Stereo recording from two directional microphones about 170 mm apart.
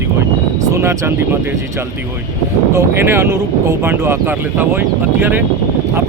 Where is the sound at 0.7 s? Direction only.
15° right (ahead or behind).